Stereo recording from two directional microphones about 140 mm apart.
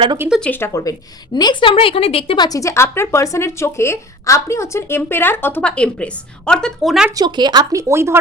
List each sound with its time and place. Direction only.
0.3 s speech: 5° left (ahead or behind); by 0.9 s 25° left (ahead or behind)
1.4 s a woman's voice: 35° left (ahead or behind); by 7.1 s centre (ahead or behind)
7.2 s speech: 30° right (ahead or behind)